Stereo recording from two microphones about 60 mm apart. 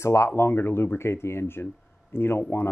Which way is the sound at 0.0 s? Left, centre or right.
Left.